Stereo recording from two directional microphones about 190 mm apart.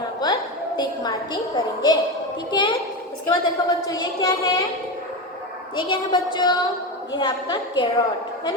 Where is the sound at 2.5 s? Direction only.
25° left (ahead or behind).